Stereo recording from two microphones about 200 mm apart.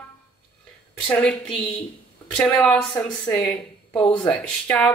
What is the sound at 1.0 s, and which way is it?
A woman's voice, 5° left (ahead or behind).